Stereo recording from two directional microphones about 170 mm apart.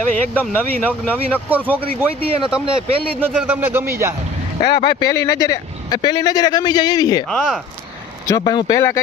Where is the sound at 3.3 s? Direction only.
5° right (ahead or behind).